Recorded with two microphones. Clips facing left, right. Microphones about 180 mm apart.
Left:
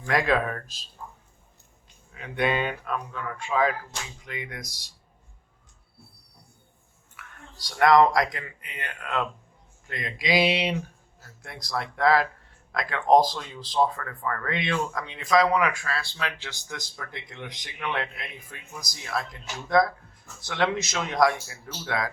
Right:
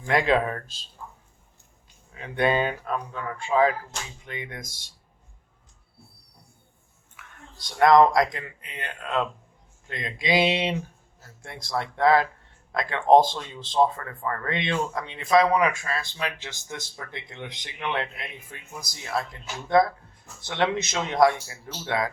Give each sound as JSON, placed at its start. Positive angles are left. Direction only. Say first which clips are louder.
{"t": 0.0, "sound": "speech", "louder": "right 2 dB", "side_deg": -25}
{"t": 2.1, "sound": "speech", "louder": "right 3 dB", "side_deg": -30}
{"t": 7.5, "sound": "speech", "louder": "right 2 dB", "side_deg": -25}